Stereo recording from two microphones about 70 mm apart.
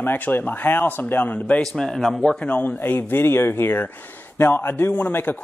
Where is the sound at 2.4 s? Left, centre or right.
Left.